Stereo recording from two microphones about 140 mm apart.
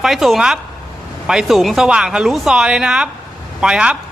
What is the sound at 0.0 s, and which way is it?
A woman's voice, centre (ahead or behind).